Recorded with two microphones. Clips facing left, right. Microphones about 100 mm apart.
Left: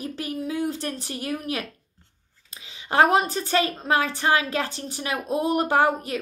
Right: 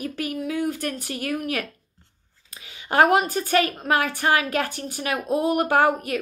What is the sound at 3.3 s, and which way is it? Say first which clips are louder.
A woman's voice: right 2 dB; 25° left (ahead or behind).